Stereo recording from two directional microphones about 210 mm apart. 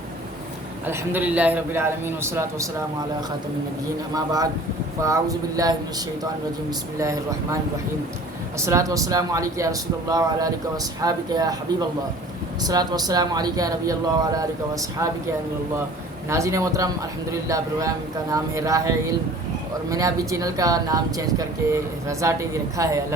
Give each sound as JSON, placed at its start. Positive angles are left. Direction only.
{"t": 0.9, "sound": "speech", "side_deg": -10}
{"t": 4.1, "sound": "speech", "side_deg": -20}
{"t": 7.0, "sound": "speech", "side_deg": -15}
{"t": 16.3, "sound": "speech", "side_deg": -15}